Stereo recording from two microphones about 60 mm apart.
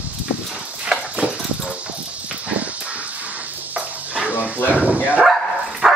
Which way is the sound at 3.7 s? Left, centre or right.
Right.